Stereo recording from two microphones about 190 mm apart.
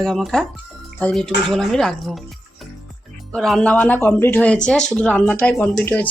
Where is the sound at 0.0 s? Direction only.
Centre (ahead or behind).